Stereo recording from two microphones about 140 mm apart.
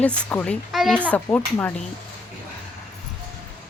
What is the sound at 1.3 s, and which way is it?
Speech, 10° left (ahead or behind).